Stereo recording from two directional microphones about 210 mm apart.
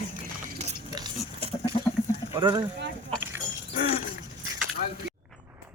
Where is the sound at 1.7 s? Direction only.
25° left (ahead or behind).